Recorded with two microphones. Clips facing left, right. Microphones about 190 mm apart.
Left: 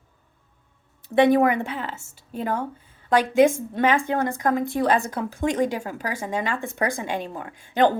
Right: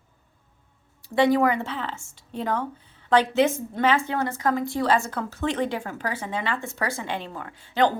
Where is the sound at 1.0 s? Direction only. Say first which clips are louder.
Left 3 dB; 20° left (ahead or behind).